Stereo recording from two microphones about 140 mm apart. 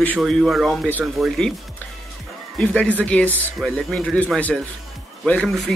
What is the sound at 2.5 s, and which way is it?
Speech, 10° left (ahead or behind).